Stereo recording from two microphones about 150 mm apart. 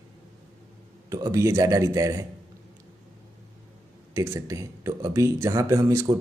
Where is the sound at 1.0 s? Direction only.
25° right (ahead or behind).